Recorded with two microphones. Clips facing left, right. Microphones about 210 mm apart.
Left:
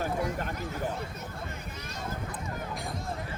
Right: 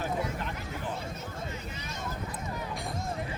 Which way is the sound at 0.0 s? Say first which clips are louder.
Left 2 dB; 45° left (ahead or behind).